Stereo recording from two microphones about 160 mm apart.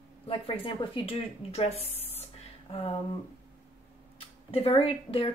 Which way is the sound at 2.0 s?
35° left (ahead or behind).